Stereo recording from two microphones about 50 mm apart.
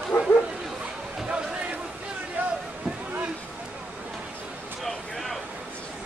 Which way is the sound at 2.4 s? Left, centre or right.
Right.